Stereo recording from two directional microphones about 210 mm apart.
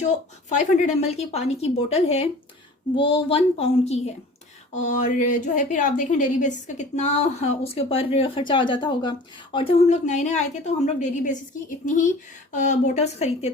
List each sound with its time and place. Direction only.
0.5 s speech: 30° left (ahead or behind)
12.5 s speech: 35° left (ahead or behind)